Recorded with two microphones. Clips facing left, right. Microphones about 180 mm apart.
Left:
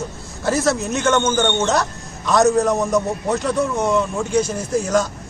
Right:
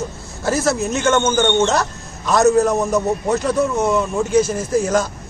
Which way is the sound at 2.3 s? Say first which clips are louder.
Right 1 dB; centre (ahead or behind).